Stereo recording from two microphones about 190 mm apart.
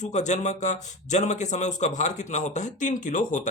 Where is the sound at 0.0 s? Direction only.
40° left (ahead or behind).